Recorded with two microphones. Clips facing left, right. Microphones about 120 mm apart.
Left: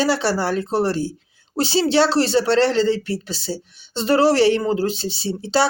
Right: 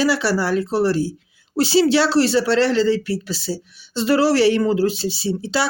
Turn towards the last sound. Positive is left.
turn(degrees=30)  # may be behind; listen again after turning